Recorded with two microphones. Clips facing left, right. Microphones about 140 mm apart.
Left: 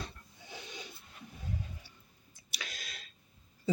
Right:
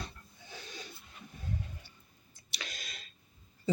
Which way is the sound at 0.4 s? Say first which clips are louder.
Left 1 dB; 20° left (ahead or behind).